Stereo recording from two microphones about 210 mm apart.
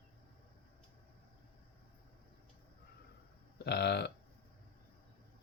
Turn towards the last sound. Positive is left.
turn(degrees=55)  # may be behind; listen again after turning